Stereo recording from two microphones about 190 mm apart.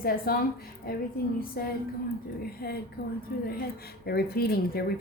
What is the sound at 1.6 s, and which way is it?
A woman's voice, 55° left (ahead or behind).